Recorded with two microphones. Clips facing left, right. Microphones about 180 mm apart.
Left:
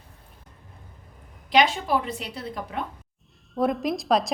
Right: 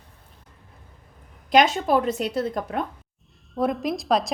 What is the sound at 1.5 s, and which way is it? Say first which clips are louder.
A woman's voice: right 3 dB; 45° right (ahead or behind).